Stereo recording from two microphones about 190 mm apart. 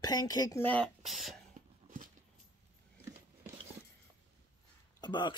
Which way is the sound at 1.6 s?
40° right (ahead or behind).